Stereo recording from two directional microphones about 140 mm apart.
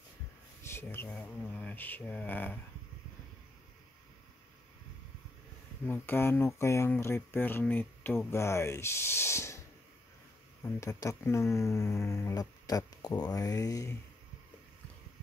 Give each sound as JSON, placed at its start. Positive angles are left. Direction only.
{"t": 0.7, "sound": "a sound", "side_deg": 15}
{"t": 1.1, "sound": "speech", "side_deg": 10}
{"t": 5.9, "sound": "speech", "side_deg": 15}
{"t": 10.6, "sound": "speech", "side_deg": 20}